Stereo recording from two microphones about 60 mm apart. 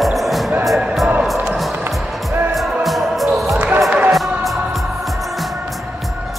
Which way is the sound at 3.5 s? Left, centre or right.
Right.